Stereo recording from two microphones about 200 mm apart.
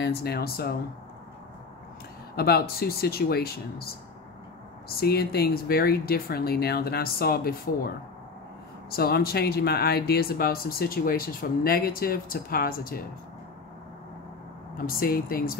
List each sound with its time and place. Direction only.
0.0 s speech: 50° left (ahead or behind)
2.3 s speech: 50° left (ahead or behind)
5.0 s speech: 50° left (ahead or behind)
8.9 s speech: 50° left (ahead or behind)
14.9 s speech: 50° left (ahead or behind)